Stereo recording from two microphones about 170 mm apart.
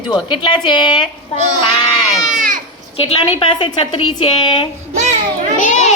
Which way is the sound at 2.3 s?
50° right (ahead or behind).